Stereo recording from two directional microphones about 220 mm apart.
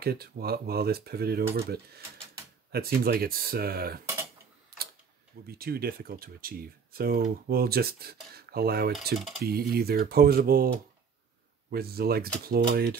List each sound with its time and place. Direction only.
0.0 s speech: 45° right (ahead or behind)
4.7 s tick-tock: 45° right (ahead or behind)
5.5 s speech: 45° right (ahead or behind)
11.7 s speech: 45° right (ahead or behind)